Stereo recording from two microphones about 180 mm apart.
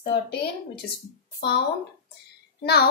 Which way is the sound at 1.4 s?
65° left (ahead or behind).